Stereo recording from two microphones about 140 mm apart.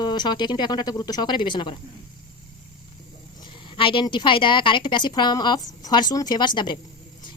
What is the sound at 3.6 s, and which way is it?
Speech, 35° left (ahead or behind).